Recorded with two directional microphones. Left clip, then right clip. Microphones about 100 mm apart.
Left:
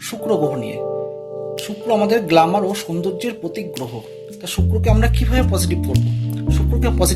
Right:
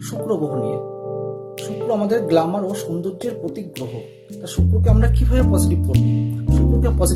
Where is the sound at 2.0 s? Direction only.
15° right (ahead or behind).